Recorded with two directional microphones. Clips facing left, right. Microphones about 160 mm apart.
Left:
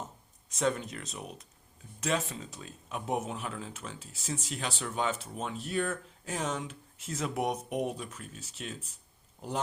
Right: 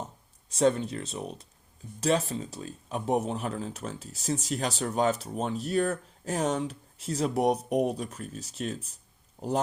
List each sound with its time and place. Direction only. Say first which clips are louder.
0.5 s speech: right 6 dB; 30° right (ahead or behind)